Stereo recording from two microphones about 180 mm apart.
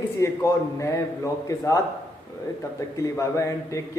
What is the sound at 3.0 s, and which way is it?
Speech, 15° left (ahead or behind).